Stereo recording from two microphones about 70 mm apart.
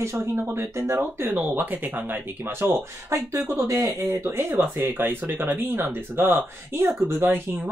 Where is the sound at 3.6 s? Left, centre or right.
Right.